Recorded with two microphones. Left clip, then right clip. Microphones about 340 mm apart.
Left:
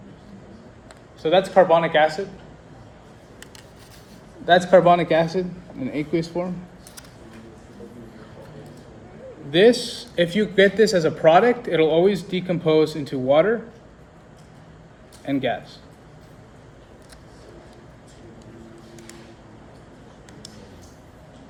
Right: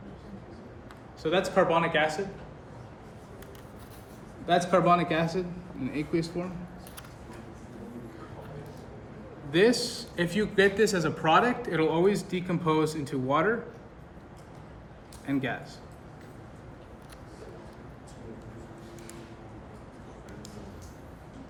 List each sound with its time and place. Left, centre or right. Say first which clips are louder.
1.3 s a man's voice: left 9 dB; left
4.6 s a man's voice: left 8 dB; left
9.5 s a man's voice: left 8 dB; left
15.3 s a man's voice: left 8 dB; left